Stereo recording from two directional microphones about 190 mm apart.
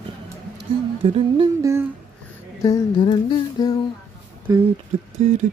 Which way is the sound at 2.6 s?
20° left (ahead or behind).